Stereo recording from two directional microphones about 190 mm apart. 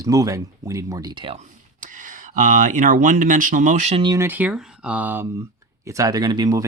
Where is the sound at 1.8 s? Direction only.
45° right (ahead or behind).